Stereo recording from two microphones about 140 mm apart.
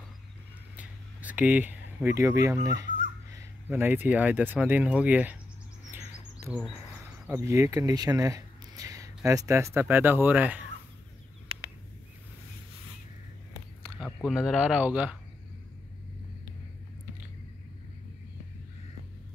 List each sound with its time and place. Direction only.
0.7 s speech: 10° right (ahead or behind)
7.2 s speech: 20° right (ahead or behind)
13.9 s speech: 5° right (ahead or behind)